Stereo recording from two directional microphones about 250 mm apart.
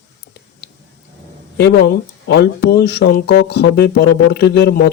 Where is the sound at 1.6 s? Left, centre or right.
Left.